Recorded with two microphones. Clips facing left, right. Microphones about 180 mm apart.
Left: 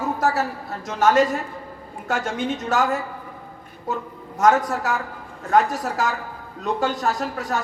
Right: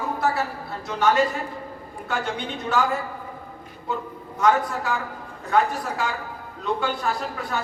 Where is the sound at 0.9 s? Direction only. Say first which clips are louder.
Left 3 dB; 45° left (ahead or behind).